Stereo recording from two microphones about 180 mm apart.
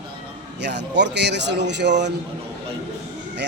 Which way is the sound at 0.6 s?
70° right (ahead or behind).